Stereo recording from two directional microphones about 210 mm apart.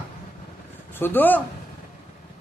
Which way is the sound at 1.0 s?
10° left (ahead or behind).